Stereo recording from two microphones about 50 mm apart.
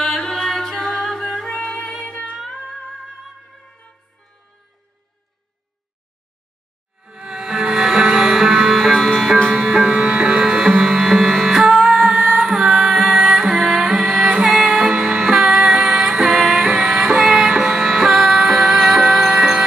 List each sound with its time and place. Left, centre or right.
0.0 s music: centre
7.0 s music: centre